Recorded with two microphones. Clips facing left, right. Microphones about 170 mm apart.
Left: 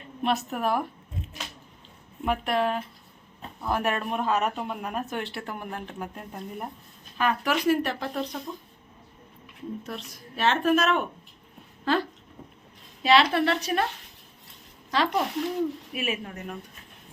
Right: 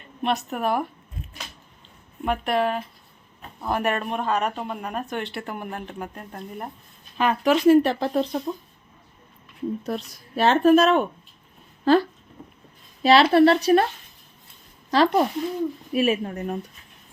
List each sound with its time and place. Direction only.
0.2 s speech: centre (ahead or behind)
2.2 s speech: centre (ahead or behind)
7.2 s speech: 20° right (ahead or behind)
9.8 s speech: 35° right (ahead or behind)
11.9 s a sound: 40° right (ahead or behind)
13.0 s a woman's voice: 35° right (ahead or behind)
14.8 s speech: 40° right (ahead or behind)